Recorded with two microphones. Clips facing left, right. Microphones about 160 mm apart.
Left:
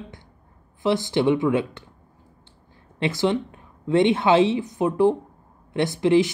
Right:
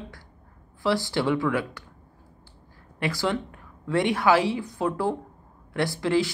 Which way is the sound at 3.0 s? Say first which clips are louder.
Left 4 dB; 20° left (ahead or behind).